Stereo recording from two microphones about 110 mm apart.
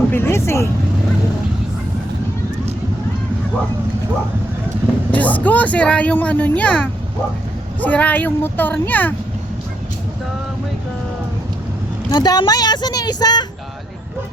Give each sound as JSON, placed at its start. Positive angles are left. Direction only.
{"t": 0.1, "sound": "speech", "side_deg": 20}
{"t": 5.1, "sound": "speech", "side_deg": 15}
{"t": 12.1, "sound": "speech", "side_deg": 40}